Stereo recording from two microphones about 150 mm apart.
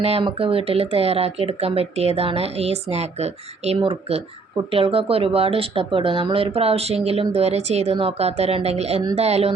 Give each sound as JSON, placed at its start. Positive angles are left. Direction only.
{"t": 0.0, "sound": "speech", "side_deg": -40}